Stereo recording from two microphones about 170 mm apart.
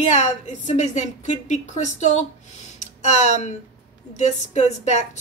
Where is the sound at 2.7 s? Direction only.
45° left (ahead or behind).